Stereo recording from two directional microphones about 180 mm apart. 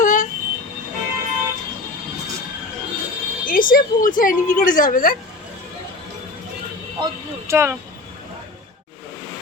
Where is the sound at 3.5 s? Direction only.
50° left (ahead or behind).